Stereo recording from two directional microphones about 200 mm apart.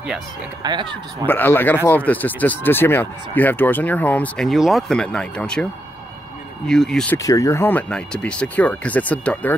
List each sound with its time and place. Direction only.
0.6 s speech: 20° right (ahead or behind)
1.2 s speech: 10° left (ahead or behind)
6.7 s speech: 5° left (ahead or behind)
7.2 s speech: 15° left (ahead or behind)